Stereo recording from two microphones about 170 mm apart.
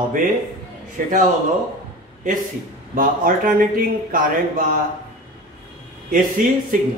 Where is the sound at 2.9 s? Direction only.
55° right (ahead or behind).